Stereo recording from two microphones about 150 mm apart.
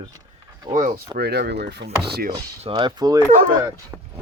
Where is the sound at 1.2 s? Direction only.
90° right.